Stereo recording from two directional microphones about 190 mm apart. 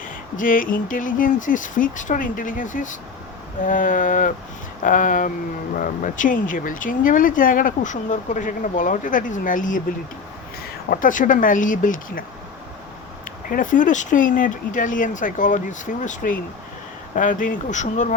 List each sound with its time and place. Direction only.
0.3 s speech: 45° left (ahead or behind)
10.8 s speech: 45° left (ahead or behind)
13.5 s speech: 45° left (ahead or behind)